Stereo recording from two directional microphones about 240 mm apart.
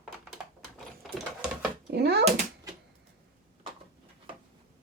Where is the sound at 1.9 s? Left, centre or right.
Right.